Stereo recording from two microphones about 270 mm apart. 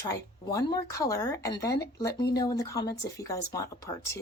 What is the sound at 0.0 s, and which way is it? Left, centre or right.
Speech, centre.